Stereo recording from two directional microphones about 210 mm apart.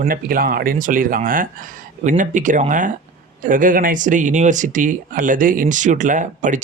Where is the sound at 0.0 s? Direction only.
45° right (ahead or behind).